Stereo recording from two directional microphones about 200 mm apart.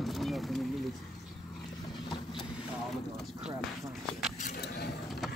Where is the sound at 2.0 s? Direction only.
25° left (ahead or behind).